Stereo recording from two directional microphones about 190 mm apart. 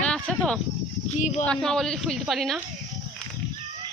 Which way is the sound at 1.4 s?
5° left (ahead or behind).